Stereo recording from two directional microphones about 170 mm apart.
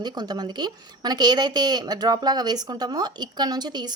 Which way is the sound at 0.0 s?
25° right (ahead or behind).